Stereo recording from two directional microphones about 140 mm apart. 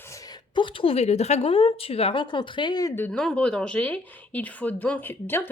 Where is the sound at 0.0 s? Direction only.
25° left (ahead or behind).